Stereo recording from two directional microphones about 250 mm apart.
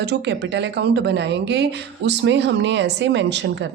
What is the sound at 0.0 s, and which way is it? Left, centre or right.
Speech, right.